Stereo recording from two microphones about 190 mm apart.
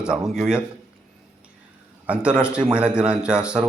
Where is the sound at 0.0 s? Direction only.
5° right (ahead or behind).